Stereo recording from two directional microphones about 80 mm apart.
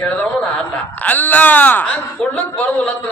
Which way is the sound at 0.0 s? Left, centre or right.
Centre.